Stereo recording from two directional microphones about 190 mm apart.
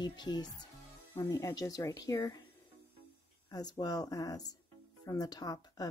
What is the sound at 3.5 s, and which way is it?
Speech, 20° left (ahead or behind).